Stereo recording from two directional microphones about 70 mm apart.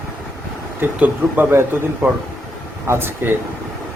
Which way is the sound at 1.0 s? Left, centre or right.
Right.